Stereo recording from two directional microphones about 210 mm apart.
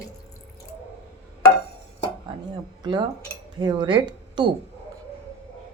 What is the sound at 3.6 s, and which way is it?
Speech, 20° right (ahead or behind).